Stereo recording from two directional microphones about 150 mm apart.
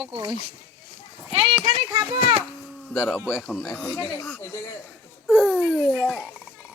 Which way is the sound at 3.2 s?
10° right (ahead or behind).